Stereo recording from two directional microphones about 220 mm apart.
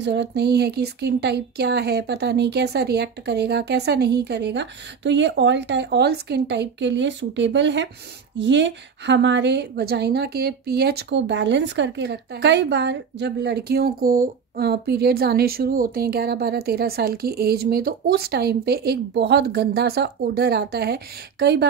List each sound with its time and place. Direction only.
0.0 s a woman's voice: 50° right (ahead or behind)